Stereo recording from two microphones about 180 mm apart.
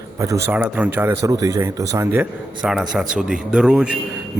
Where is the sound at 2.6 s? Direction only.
5° right (ahead or behind).